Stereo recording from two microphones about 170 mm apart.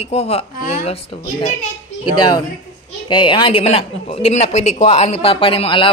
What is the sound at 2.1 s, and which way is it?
A woman's voice, 25° left (ahead or behind).